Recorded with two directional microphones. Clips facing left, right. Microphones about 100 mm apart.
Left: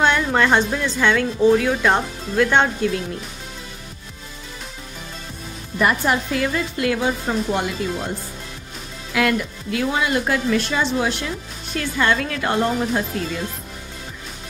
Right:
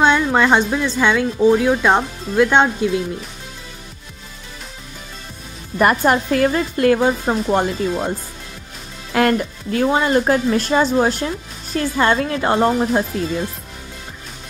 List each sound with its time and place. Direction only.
0.0 s speech: 20° right (ahead or behind)
5.8 s a woman's voice: 45° right (ahead or behind)
9.1 s speech: 45° right (ahead or behind)